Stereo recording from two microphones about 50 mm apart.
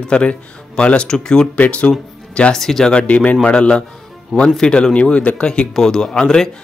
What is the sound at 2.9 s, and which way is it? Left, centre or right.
Speech, left.